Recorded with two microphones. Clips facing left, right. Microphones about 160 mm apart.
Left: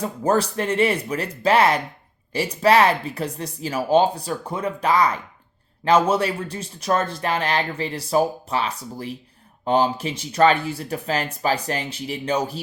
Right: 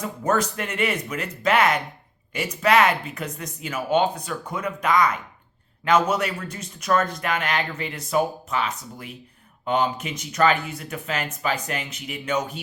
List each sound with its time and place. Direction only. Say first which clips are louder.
0.0 s speech: left 3 dB; 30° left (ahead or behind)